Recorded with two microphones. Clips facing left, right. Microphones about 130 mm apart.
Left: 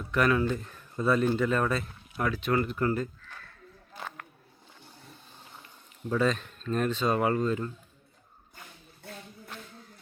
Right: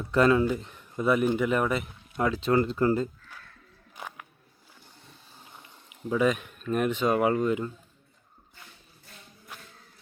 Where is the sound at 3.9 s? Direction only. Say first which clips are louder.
Even; 10° right (ahead or behind).